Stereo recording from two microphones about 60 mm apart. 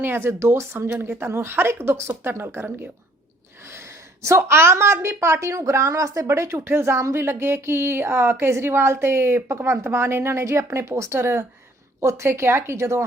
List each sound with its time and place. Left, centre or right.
0.0 s speech: right
0.9 s speech: right
3.7 s speech: right
6.7 s speech: right
11.2 s speech: right